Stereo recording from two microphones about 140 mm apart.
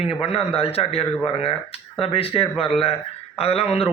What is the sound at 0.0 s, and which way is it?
Speech, 45° left (ahead or behind).